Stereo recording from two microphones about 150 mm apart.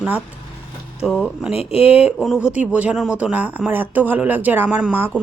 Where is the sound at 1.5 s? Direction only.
40° left (ahead or behind).